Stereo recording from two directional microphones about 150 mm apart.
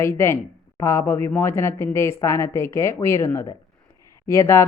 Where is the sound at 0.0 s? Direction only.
15° left (ahead or behind).